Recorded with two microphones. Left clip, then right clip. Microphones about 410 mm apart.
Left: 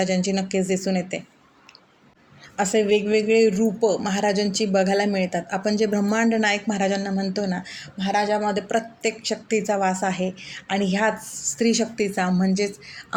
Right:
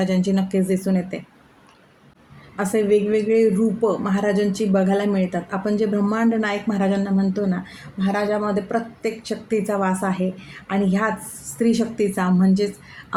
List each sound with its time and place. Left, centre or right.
0.0 s a man's voice: right
2.6 s a man's voice: right